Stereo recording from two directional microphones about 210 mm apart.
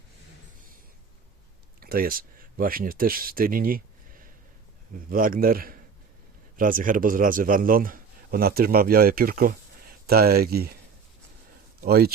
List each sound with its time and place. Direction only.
1.8 s a man's voice: 45° right (ahead or behind)
11.8 s speech: 45° right (ahead or behind)